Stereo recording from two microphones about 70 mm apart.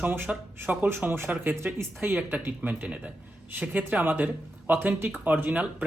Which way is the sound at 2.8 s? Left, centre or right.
Centre.